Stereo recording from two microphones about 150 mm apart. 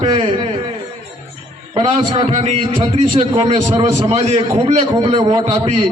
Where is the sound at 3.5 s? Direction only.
50° right (ahead or behind).